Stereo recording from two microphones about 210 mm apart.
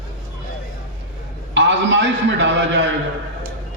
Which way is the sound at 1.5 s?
60° right (ahead or behind).